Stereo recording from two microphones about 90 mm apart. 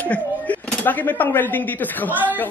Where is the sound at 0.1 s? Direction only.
20° left (ahead or behind).